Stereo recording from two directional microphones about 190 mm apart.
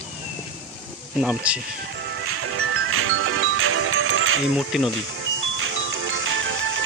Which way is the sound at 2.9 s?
90° right.